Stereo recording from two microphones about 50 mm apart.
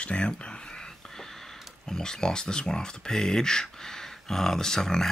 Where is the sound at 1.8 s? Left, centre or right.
Centre.